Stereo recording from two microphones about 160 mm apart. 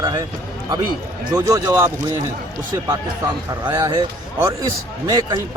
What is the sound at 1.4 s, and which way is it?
Speech, 20° right (ahead or behind).